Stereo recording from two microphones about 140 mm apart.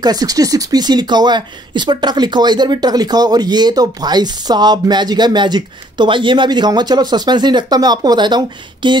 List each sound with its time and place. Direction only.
0.0 s speech: 25° right (ahead or behind)